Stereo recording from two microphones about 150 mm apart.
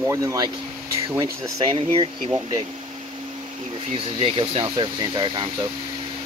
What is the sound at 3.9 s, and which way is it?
Speech, 40° right (ahead or behind).